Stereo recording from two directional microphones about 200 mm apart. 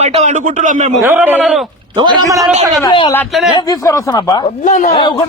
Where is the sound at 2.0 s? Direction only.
20° right (ahead or behind).